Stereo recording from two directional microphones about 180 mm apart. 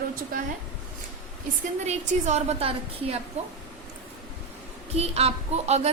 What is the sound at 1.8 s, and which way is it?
A woman's voice, 40° right (ahead or behind).